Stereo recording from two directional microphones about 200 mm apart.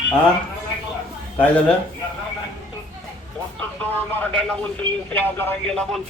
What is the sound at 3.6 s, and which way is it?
Speech, 10° left (ahead or behind).